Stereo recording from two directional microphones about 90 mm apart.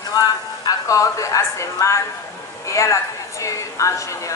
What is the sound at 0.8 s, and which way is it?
A woman's voice, 35° left (ahead or behind).